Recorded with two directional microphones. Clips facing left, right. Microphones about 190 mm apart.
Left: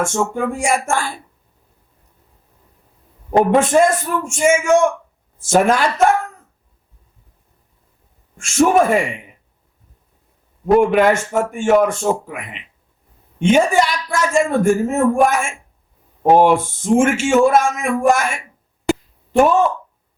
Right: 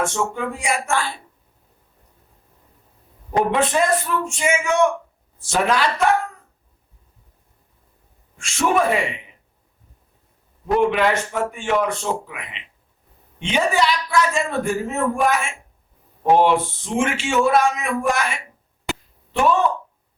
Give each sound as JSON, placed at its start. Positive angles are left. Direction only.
{"t": 0.0, "sound": "a woman's voice", "side_deg": 45}
{"t": 3.5, "sound": "a woman's voice", "side_deg": 45}
{"t": 8.4, "sound": "a woman's voice", "side_deg": 45}
{"t": 10.8, "sound": "a woman's voice", "side_deg": 45}
{"t": 18.9, "sound": "a sound", "side_deg": 45}